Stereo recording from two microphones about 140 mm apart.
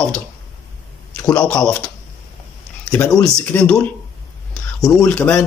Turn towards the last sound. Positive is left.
turn(degrees=10)  # may be behind; listen again after turning